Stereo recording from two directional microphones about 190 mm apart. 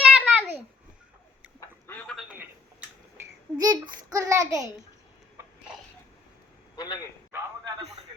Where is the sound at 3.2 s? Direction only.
20° right (ahead or behind).